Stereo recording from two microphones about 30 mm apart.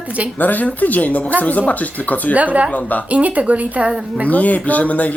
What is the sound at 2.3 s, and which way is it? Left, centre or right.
Speech, right.